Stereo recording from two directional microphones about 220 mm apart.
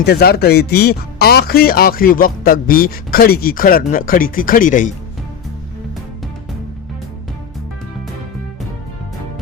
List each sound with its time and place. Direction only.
0.0 s speech: 45° left (ahead or behind)